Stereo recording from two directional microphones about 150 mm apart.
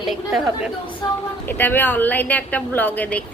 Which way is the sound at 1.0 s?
25° left (ahead or behind).